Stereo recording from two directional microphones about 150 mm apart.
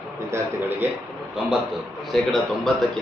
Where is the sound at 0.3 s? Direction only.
20° right (ahead or behind).